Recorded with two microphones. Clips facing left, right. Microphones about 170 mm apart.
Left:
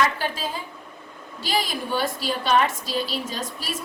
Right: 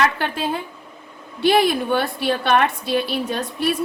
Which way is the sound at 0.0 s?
60° right (ahead or behind).